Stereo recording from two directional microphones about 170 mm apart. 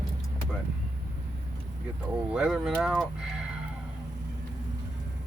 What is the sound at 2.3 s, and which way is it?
Speech, 5° right (ahead or behind).